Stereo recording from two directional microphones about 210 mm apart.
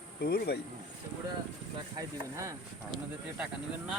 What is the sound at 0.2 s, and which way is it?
Speech, 45° left (ahead or behind).